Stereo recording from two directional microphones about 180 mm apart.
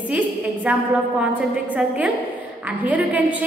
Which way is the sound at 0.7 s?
10° right (ahead or behind).